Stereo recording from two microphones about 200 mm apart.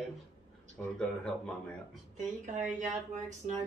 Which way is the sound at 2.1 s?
35° right (ahead or behind).